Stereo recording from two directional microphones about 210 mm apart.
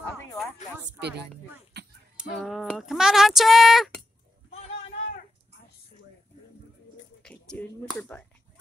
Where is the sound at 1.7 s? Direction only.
55° right (ahead or behind).